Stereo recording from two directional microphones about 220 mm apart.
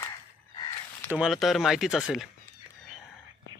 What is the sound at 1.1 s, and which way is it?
Speech, centre (ahead or behind).